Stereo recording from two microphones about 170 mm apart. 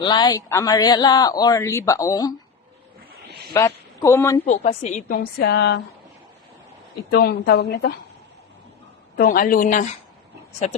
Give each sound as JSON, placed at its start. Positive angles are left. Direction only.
{"t": 0.1, "sound": "speech", "side_deg": 20}
{"t": 3.2, "sound": "a sound", "side_deg": -70}
{"t": 3.5, "sound": "a woman's voice", "side_deg": 15}
{"t": 4.4, "sound": "a woman's voice", "side_deg": 40}
{"t": 7.1, "sound": "a woman's voice", "side_deg": 65}
{"t": 9.1, "sound": "speech", "side_deg": 55}